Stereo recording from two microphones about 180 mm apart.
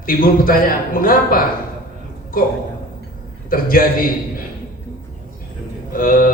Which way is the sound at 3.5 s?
50° left (ahead or behind).